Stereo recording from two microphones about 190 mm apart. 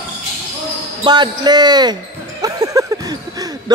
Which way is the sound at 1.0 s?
20° right (ahead or behind).